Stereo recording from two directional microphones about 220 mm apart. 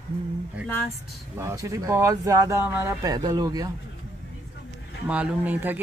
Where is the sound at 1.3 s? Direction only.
15° right (ahead or behind).